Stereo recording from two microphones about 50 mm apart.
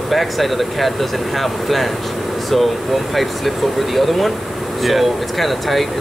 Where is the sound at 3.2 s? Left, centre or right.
Centre.